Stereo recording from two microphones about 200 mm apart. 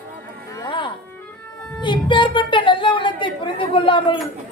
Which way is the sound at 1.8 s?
25° left (ahead or behind).